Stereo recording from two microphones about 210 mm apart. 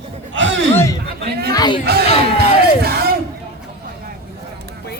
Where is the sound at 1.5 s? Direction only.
20° left (ahead or behind).